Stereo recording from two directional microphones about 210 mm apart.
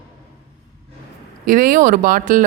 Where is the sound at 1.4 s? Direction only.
40° right (ahead or behind).